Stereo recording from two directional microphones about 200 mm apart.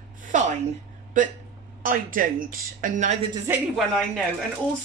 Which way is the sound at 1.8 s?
45° right (ahead or behind).